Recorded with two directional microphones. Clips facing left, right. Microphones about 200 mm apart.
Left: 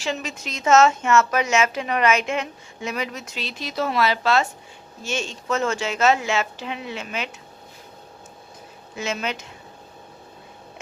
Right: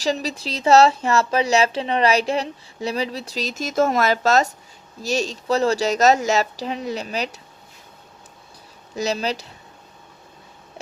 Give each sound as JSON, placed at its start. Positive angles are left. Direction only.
{"t": 0.0, "sound": "a woman's voice", "side_deg": -35}
{"t": 9.0, "sound": "a woman's voice", "side_deg": -35}